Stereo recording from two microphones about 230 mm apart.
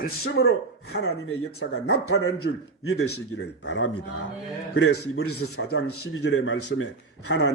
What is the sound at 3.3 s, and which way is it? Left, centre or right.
Speech, left.